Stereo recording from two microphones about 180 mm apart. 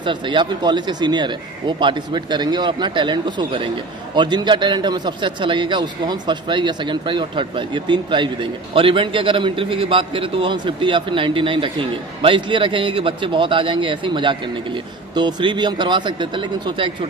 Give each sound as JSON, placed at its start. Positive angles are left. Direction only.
{"t": 0.0, "sound": "speech", "side_deg": -25}